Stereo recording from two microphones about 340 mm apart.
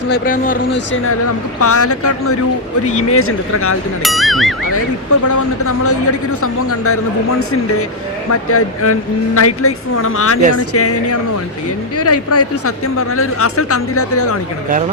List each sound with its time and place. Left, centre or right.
0.1 s speech: left
1.5 s speech: left
4.0 s speech: centre
5.2 s speech: left